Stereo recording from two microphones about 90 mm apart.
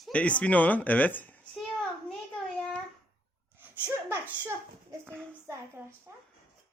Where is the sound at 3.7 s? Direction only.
20° right (ahead or behind).